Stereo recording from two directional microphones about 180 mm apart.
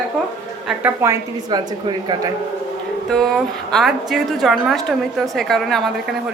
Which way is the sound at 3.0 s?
Centre (ahead or behind).